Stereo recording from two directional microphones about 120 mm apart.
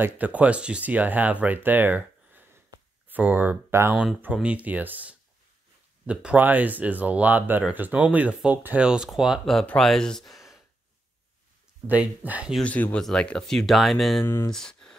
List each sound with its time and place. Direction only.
0.0 s speech: 10° right (ahead or behind)
3.9 s speech: 5° right (ahead or behind)
11.9 s speech: 15° right (ahead or behind)
12.6 s speech: 10° left (ahead or behind)
14.5 s music: 5° left (ahead or behind)